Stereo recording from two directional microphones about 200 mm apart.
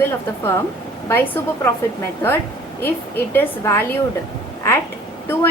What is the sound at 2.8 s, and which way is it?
A woman's voice, 10° left (ahead or behind).